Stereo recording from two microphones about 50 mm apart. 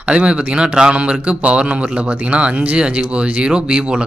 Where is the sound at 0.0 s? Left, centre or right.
Right.